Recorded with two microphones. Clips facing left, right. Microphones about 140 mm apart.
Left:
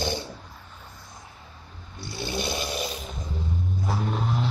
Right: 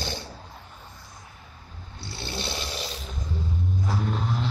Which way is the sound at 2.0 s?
15° left (ahead or behind).